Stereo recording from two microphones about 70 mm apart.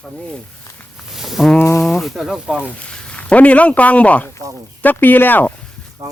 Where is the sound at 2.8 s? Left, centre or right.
Centre.